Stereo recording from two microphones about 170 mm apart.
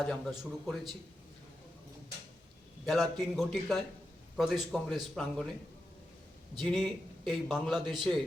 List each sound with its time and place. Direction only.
0.0 s speech: centre (ahead or behind)
2.8 s speech: centre (ahead or behind)
6.7 s speech: centre (ahead or behind)